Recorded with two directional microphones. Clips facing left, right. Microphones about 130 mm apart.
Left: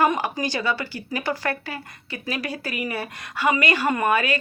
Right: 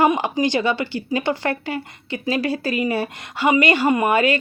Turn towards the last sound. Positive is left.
turn(degrees=-25)  # may be behind; listen again after turning